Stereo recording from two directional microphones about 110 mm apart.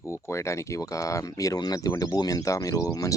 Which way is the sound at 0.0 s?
25° left (ahead or behind).